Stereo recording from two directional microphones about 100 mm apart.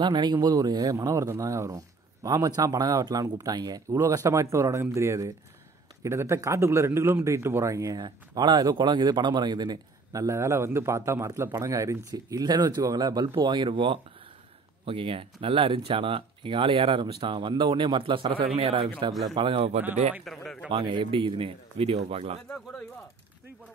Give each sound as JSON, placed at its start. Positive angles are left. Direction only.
{"t": 0.0, "sound": "a man's voice", "side_deg": -45}
{"t": 20.3, "sound": "speech", "side_deg": 0}
{"t": 20.7, "sound": "speech", "side_deg": -55}
{"t": 22.5, "sound": "speech", "side_deg": 10}